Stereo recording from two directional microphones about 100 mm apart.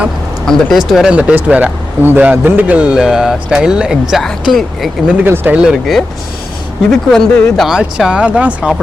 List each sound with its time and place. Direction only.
0.4 s a man's voice: 5° left (ahead or behind)
5.1 s speech: 20° right (ahead or behind)
5.5 s a man's voice: 10° right (ahead or behind)
6.9 s a man's voice: 5° left (ahead or behind); by 8.7 s 15° right (ahead or behind)